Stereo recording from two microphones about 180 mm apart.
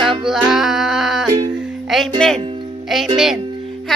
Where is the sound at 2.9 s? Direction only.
Centre (ahead or behind).